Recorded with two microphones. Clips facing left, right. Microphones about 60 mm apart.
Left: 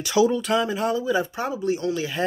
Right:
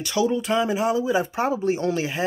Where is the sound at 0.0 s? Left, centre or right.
Centre.